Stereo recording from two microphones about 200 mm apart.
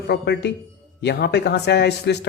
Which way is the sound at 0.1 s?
55° left (ahead or behind).